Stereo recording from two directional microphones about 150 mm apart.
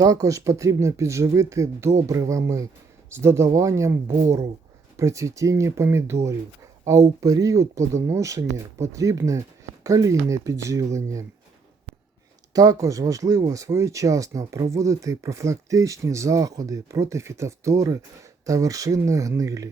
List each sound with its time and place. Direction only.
0.0 s speech: 25° right (ahead or behind)
12.5 s speech: 25° right (ahead or behind)